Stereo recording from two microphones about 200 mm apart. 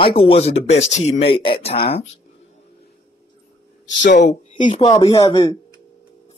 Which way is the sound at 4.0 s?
45° left (ahead or behind).